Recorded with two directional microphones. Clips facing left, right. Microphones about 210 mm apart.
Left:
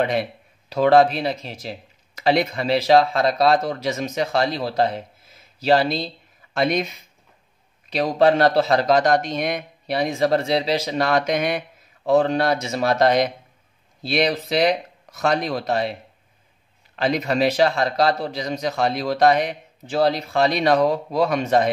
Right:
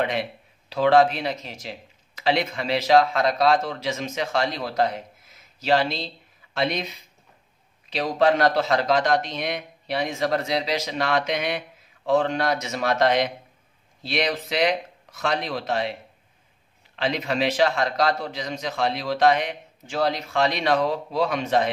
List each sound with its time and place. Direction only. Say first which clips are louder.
0.7 s speech: left 3 dB; 40° left (ahead or behind)
7.9 s speech: left 3 dB; 35° left (ahead or behind)
16.9 s speech: left 4 dB; 45° left (ahead or behind)